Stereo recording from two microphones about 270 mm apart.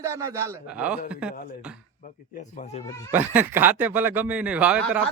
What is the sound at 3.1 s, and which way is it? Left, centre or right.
A man's voice, centre.